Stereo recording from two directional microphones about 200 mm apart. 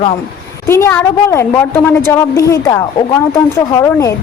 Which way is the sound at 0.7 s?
15° left (ahead or behind).